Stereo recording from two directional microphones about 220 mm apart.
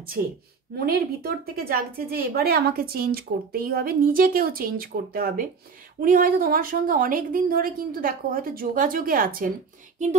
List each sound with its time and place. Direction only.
0.8 s a woman's voice: 45° right (ahead or behind)